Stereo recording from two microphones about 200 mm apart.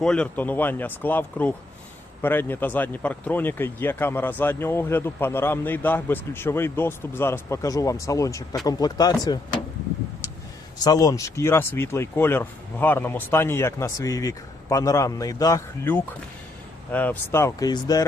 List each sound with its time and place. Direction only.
0.0 s speech: 5° left (ahead or behind); by 9.6 s 20° left (ahead or behind)
10.8 s speech: 15° left (ahead or behind)